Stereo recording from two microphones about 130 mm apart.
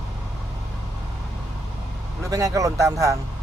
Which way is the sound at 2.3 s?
25° right (ahead or behind).